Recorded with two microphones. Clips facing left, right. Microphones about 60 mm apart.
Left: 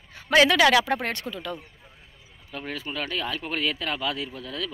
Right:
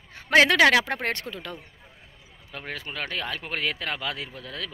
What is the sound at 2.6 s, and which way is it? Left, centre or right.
A man's voice, right.